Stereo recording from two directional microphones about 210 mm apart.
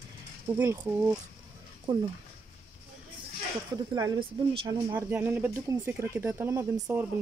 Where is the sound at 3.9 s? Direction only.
20° right (ahead or behind).